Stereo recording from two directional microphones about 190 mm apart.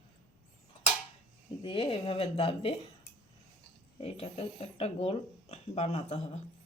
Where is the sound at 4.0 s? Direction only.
35° left (ahead or behind).